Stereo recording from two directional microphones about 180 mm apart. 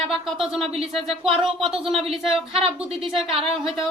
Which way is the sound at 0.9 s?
Centre (ahead or behind).